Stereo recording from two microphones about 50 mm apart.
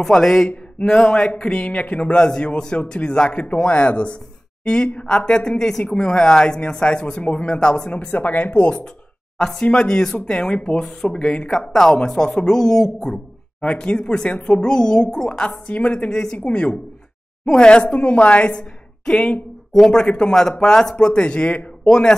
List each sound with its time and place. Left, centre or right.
0.0 s speech: centre
8.1 s speech: left
9.4 s speech: centre
13.6 s speech: left
16.1 s a woman's voice: centre
21.0 s speech: left
21.8 s speech: centre